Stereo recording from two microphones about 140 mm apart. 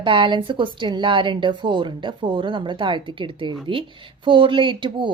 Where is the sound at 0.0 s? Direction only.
35° right (ahead or behind).